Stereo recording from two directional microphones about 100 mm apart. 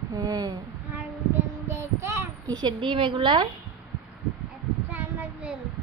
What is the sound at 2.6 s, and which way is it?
Speech, 50° right (ahead or behind).